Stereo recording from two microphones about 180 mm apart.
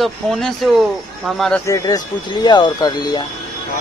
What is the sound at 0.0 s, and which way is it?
Speech, centre (ahead or behind).